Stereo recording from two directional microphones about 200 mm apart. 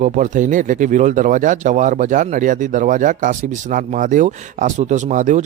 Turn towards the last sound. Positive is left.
turn(degrees=-40)  # may be behind; listen again after turning